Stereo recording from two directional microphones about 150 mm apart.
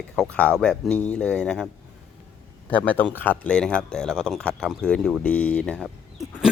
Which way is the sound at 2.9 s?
10° left (ahead or behind).